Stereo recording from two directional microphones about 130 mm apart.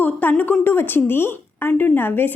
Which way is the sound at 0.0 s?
15° left (ahead or behind).